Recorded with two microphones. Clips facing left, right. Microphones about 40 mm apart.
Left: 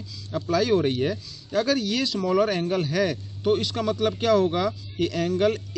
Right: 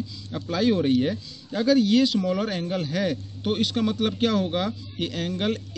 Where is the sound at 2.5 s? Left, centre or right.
Left.